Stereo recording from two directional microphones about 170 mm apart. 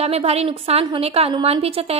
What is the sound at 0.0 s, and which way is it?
A woman's voice, 35° right (ahead or behind).